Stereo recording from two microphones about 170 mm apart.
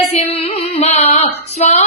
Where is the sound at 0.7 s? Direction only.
40° left (ahead or behind).